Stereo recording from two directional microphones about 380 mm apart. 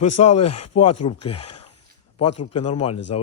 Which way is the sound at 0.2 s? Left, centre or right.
Centre.